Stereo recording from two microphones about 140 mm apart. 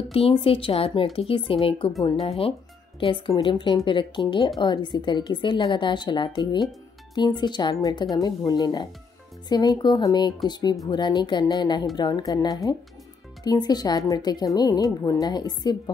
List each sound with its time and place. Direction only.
0.1 s speech: 40° left (ahead or behind)